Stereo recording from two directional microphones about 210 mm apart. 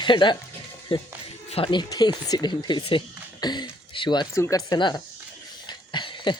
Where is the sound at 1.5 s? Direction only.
25° left (ahead or behind).